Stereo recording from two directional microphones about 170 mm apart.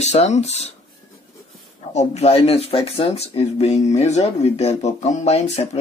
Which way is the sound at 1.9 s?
40° left (ahead or behind).